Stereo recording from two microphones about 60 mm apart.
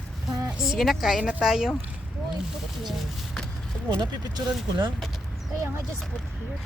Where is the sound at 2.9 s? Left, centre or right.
Centre.